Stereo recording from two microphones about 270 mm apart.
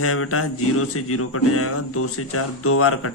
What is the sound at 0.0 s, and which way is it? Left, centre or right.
Mantra, left.